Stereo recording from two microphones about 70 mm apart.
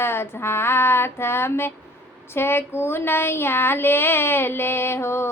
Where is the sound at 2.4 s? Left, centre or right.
Left.